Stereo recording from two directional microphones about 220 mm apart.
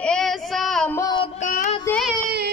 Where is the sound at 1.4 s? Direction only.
35° left (ahead or behind).